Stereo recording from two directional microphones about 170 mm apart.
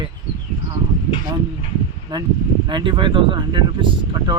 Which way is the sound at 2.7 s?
30° right (ahead or behind).